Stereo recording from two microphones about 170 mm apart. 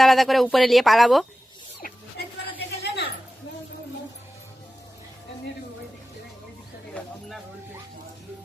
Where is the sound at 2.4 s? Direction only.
80° left.